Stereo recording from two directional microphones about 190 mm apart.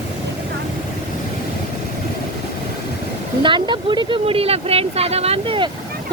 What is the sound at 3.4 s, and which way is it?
Speech, 25° right (ahead or behind).